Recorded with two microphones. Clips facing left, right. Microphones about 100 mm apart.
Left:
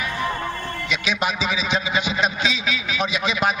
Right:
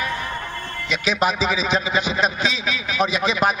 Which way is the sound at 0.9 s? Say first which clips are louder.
Right 4 dB; 40° right (ahead or behind).